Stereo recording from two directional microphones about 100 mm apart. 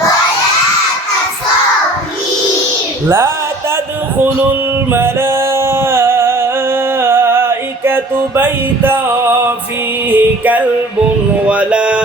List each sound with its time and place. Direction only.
3.1 s speech: 25° right (ahead or behind)
4.9 s music: 25° right (ahead or behind)
10.1 s mantra: 15° right (ahead or behind)